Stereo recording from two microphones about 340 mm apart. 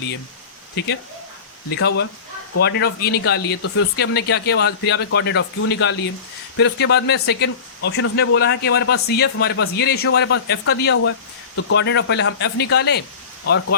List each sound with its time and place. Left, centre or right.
0.8 s speech: left